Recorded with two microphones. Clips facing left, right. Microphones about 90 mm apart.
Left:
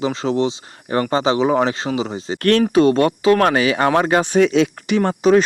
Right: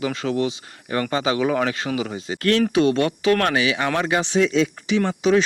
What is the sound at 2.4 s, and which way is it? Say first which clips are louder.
Speech: left 4 dB; 55° left (ahead or behind).